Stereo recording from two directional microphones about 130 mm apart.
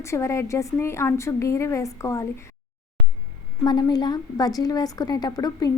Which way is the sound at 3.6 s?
35° left (ahead or behind).